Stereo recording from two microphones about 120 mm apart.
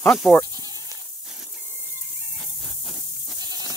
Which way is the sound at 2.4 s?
Centre (ahead or behind).